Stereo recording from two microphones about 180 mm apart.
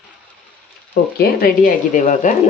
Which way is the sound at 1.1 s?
55° left (ahead or behind).